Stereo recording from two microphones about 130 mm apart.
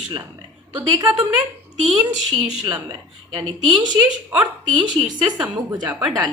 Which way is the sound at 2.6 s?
30° right (ahead or behind).